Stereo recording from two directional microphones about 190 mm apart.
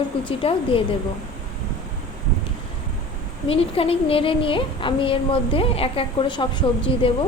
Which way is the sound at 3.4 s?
30° left (ahead or behind).